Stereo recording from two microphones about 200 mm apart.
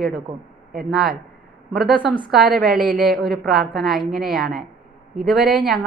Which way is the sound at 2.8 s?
45° right (ahead or behind).